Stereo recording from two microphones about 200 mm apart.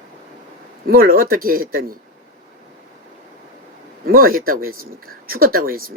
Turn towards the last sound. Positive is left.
turn(degrees=-45)  # may be behind; listen again after turning